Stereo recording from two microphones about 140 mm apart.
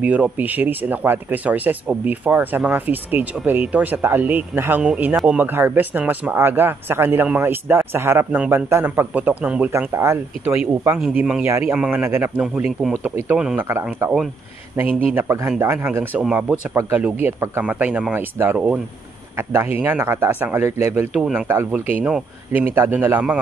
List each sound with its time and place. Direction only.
0.0 s speech: 10° right (ahead or behind)
11.4 s speech: 20° right (ahead or behind)
11.7 s speech: 5° right (ahead or behind)
13.6 s speech: 20° right (ahead or behind)
21.1 s speech: 5° right (ahead or behind)
21.5 s speech: 15° right (ahead or behind)